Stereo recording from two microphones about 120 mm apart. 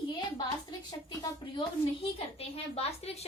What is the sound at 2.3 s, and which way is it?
Speech, 55° left (ahead or behind).